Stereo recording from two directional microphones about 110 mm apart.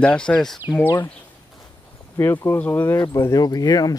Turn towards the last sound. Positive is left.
turn(degrees=35)  # may be behind; listen again after turning